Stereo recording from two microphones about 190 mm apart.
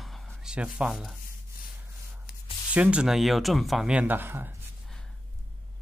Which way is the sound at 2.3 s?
50° left (ahead or behind).